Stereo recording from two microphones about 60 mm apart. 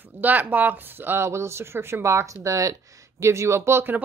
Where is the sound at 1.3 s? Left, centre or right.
Right.